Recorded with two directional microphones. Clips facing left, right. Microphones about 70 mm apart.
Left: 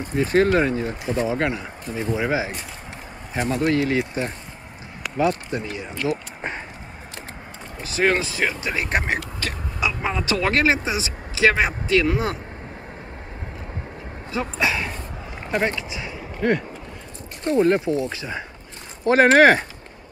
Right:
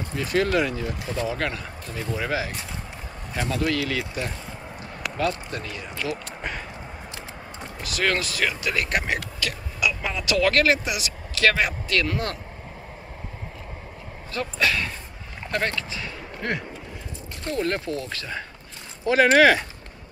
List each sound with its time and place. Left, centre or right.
0.0 s speech: left
7.8 s speech: left
14.3 s speech: centre
16.3 s speech: centre
17.5 s speech: left
19.0 s speech: left